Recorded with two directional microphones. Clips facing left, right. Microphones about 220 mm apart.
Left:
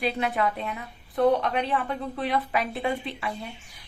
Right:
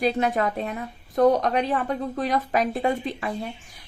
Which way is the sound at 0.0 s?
40° right (ahead or behind).